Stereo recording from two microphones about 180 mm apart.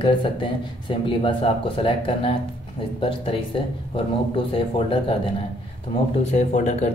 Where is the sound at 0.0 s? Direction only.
30° left (ahead or behind).